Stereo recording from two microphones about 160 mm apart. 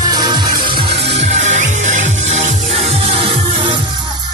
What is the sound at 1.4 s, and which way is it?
Music, 50° right (ahead or behind).